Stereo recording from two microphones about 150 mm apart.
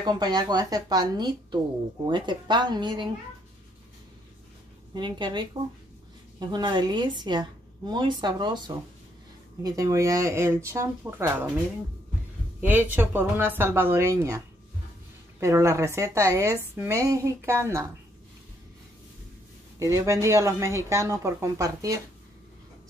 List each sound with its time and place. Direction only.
0.0 s a woman's voice: 30° right (ahead or behind)
4.9 s a woman's voice: 30° right (ahead or behind)
12.5 s speech: 10° right (ahead or behind)
15.4 s a woman's voice: 20° right (ahead or behind)
19.8 s a woman's voice: 20° right (ahead or behind)